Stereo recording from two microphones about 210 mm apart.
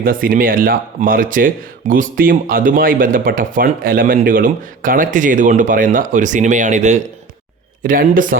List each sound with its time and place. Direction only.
0.0 s speech: 40° right (ahead or behind)